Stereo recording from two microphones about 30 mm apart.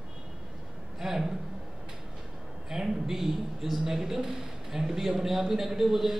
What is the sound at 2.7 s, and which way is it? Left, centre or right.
A man's voice, centre.